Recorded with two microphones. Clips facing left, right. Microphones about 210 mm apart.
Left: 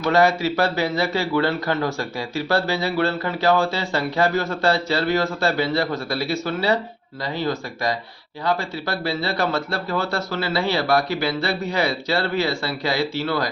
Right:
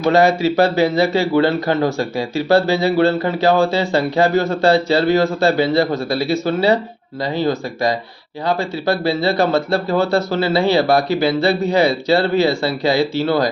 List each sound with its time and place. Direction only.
0.0 s speech: 25° right (ahead or behind)